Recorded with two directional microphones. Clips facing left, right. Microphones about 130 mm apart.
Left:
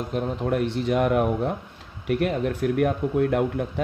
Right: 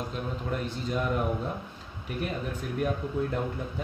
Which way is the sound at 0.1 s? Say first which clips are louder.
Left 8 dB; 65° left (ahead or behind).